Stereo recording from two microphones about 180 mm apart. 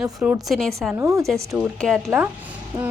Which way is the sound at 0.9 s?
15° right (ahead or behind).